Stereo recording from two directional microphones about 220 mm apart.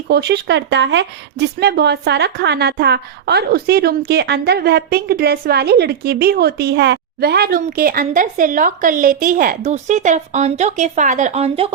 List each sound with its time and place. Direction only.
0.1 s speech: 50° right (ahead or behind); by 11.7 s 25° right (ahead or behind)